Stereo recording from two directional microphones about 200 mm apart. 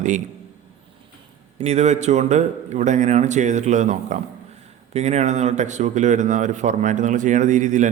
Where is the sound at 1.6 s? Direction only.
35° right (ahead or behind).